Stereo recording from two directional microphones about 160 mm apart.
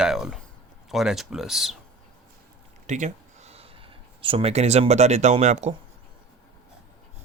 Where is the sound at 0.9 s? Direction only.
Centre (ahead or behind).